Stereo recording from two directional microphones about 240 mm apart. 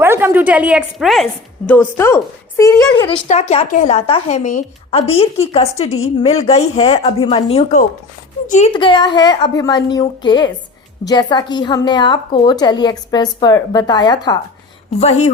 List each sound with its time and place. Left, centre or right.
0.0 s a woman's voice: centre
2.9 s a woman's voice: left